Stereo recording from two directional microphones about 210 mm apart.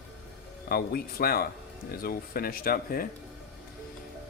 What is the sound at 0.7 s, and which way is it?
A man's voice, 45° left (ahead or behind).